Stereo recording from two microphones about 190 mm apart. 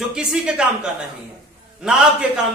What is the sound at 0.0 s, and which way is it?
A man's voice, 5° right (ahead or behind).